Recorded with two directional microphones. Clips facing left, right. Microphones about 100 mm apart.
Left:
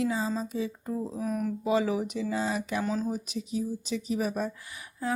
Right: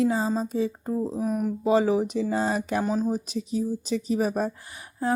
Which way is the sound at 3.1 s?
35° right (ahead or behind).